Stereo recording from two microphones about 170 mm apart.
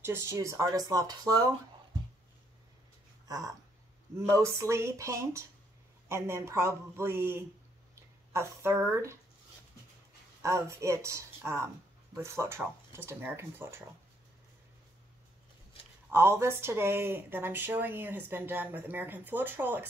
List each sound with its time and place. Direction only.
0.0 s speech: 15° right (ahead or behind)
3.3 s speech: 20° right (ahead or behind)
10.4 s speech: 15° right (ahead or behind)
16.1 s speech: 15° right (ahead or behind)